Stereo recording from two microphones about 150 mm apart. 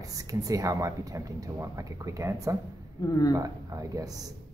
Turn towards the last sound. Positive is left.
turn(degrees=-25)  # may be behind; listen again after turning